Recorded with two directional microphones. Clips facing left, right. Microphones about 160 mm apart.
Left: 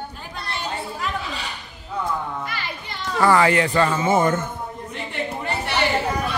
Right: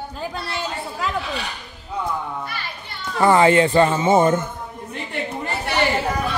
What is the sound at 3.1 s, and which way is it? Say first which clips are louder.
Speech: right 3 dB; 25° right (ahead or behind).